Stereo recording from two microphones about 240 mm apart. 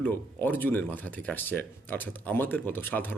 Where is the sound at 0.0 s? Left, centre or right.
Centre.